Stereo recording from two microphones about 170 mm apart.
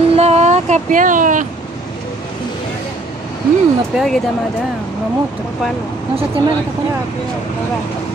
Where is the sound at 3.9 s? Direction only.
Centre (ahead or behind).